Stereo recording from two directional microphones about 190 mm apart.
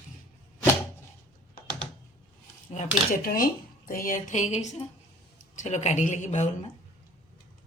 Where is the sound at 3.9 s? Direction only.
45° left (ahead or behind).